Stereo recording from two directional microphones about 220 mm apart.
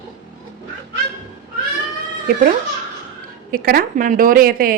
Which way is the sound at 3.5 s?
40° right (ahead or behind).